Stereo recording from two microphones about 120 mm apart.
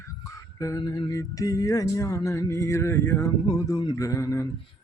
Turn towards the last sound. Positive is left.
turn(degrees=25)  # may be behind; listen again after turning